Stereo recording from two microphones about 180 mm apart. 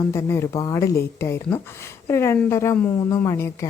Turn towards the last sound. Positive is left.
turn(degrees=15)  # may be behind; listen again after turning